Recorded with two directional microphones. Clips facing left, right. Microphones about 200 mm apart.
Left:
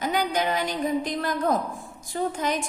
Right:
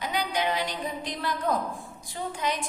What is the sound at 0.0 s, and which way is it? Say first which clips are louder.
A woman's voice: left 4 dB; 45° left (ahead or behind).